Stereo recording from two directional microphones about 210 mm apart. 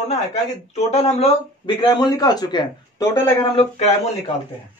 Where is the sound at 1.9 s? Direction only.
20° left (ahead or behind).